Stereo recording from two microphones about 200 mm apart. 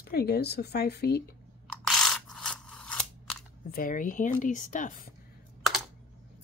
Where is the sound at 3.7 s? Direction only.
45° left (ahead or behind).